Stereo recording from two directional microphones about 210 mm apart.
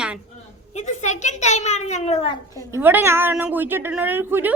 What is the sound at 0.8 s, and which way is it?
A child's voice, 35° left (ahead or behind).